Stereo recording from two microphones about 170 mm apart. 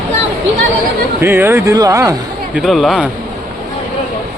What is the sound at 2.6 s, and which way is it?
Speech, centre (ahead or behind).